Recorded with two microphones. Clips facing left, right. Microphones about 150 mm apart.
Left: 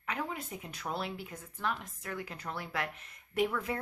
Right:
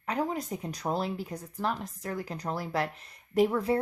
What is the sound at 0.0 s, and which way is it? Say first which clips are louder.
Speech: right 7 dB; 35° right (ahead or behind).